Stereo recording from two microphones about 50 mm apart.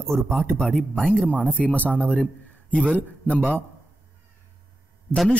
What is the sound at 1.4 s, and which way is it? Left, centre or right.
A man's voice, left.